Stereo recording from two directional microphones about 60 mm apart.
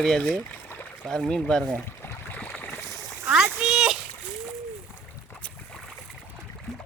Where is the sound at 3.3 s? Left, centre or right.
Centre.